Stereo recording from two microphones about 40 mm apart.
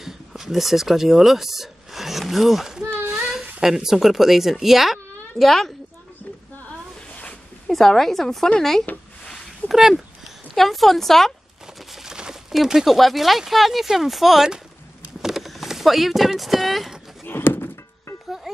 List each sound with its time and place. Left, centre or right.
0.0 s speech: centre
3.1 s child singing: centre
3.6 s speech: centre
4.9 s a sound: centre
7.6 s a woman's voice: centre
9.7 s speech: centre
11.9 s crumpling: centre
12.5 s speech: centre
17.2 s a sound: left